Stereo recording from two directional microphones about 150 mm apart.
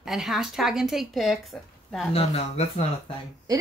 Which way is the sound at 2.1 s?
45° left (ahead or behind).